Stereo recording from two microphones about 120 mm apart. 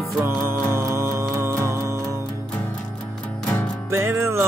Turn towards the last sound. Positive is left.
turn(degrees=-20)  # may be behind; listen again after turning